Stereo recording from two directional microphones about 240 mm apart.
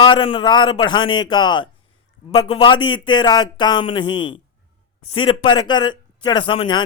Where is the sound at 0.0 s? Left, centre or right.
Left.